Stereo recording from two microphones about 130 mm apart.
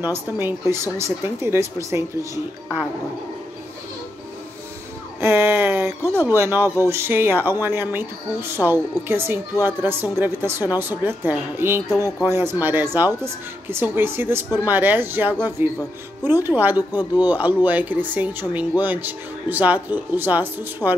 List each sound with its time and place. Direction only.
0.0 s speech: 15° right (ahead or behind)
5.2 s speech: 15° right (ahead or behind)
9.6 s speech: 30° left (ahead or behind)
9.8 s speech: 15° right (ahead or behind)